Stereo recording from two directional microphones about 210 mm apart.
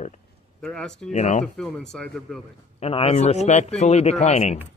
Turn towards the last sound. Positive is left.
turn(degrees=30)  # may be behind; listen again after turning